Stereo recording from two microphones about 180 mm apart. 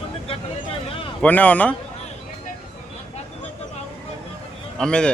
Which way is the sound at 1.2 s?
10° left (ahead or behind).